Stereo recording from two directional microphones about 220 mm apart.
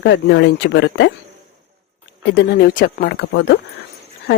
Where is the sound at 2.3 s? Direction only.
50° left (ahead or behind).